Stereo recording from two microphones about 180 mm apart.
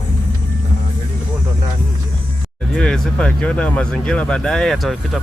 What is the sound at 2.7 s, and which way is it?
Speech, 5° left (ahead or behind).